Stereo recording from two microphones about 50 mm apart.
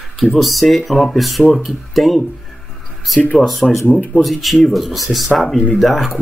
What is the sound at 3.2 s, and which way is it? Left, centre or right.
Speech, left.